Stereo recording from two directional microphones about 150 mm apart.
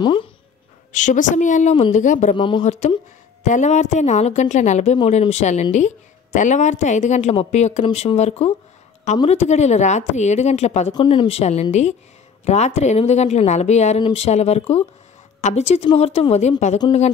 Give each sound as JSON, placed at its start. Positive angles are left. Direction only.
{"t": 0.0, "sound": "speech", "side_deg": 35}
{"t": 0.9, "sound": "a woman's voice", "side_deg": 55}
{"t": 2.3, "sound": "speech", "side_deg": 35}
{"t": 2.6, "sound": "speech", "side_deg": 50}
{"t": 10.9, "sound": "speech", "side_deg": 30}